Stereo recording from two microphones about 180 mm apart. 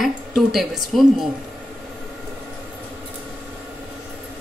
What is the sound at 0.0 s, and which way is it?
A woman's voice, centre (ahead or behind).